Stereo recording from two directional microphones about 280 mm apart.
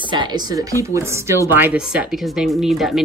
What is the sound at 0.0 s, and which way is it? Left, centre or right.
Speech, centre.